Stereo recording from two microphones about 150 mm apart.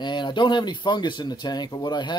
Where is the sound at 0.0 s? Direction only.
30° left (ahead or behind).